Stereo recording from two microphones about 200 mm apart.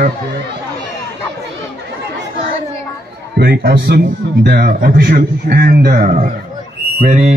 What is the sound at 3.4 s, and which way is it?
A man's voice, 50° right (ahead or behind).